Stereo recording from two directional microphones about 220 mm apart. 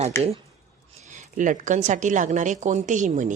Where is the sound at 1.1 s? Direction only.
35° right (ahead or behind).